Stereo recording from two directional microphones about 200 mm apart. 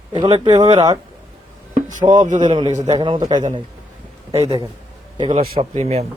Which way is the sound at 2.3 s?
35° right (ahead or behind).